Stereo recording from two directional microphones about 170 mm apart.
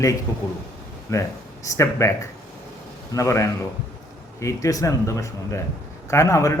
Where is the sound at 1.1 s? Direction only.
20° left (ahead or behind).